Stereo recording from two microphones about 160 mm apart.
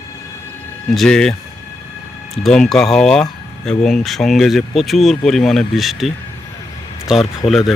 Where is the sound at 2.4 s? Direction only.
Centre (ahead or behind).